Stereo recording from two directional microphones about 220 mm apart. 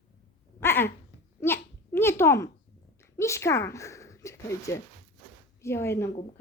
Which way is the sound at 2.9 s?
15° left (ahead or behind).